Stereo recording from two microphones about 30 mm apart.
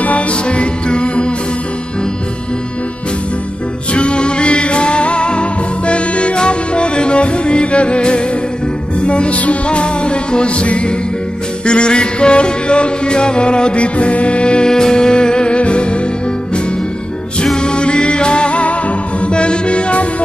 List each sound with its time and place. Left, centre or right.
0.0 s music: left
3.9 s music: left
13.9 s music: left
14.7 s music: left
17.6 s music: left
19.3 s music: left